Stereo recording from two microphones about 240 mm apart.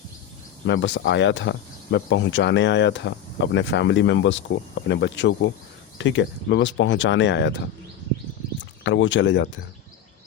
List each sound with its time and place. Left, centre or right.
0.6 s speech: left
8.8 s speech: left